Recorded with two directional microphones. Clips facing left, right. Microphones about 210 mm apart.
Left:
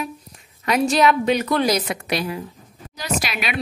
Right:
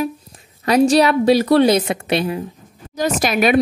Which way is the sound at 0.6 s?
35° right (ahead or behind).